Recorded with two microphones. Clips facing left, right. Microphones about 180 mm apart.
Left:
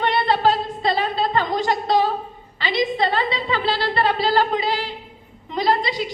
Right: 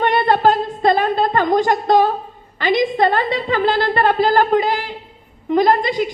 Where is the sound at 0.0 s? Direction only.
50° right (ahead or behind).